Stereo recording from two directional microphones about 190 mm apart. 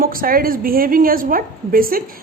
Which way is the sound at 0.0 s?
50° right (ahead or behind).